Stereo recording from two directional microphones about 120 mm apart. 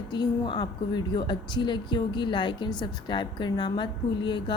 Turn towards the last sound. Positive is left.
turn(degrees=40)  # may be behind; listen again after turning